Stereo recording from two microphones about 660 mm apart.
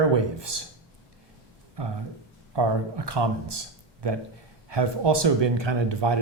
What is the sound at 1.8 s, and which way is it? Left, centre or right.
Speech, right.